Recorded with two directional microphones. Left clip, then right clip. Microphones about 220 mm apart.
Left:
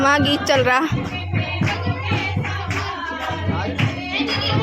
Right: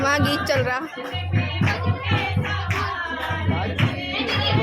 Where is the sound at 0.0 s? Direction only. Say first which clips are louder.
Left 4 dB; 15° left (ahead or behind).